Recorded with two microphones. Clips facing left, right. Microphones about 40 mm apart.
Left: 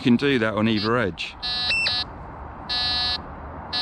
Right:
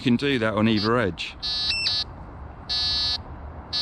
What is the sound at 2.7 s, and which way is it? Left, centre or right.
Buzzer, centre.